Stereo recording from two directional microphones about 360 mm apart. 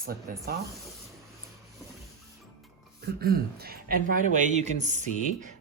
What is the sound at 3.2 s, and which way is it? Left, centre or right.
Speech, right.